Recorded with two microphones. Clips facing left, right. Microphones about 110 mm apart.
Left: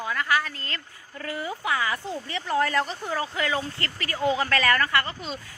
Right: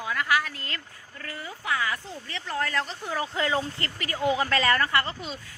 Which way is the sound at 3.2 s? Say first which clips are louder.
Right 1 dB; 25° right (ahead or behind).